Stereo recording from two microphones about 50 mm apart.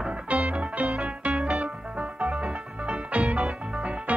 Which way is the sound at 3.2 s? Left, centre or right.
Centre.